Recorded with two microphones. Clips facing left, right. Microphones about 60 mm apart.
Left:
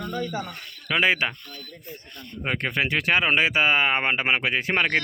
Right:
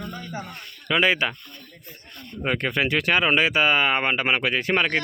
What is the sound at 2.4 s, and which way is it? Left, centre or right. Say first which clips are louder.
Speech: right 2 dB; centre.